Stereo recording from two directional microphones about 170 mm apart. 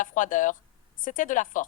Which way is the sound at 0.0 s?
50° left (ahead or behind).